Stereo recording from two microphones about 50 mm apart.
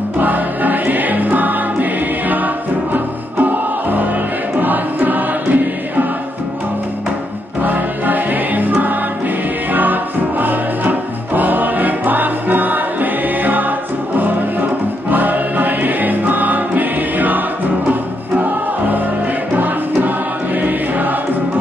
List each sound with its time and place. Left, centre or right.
0.2 s music: right
7.6 s music: right
19.5 s music: right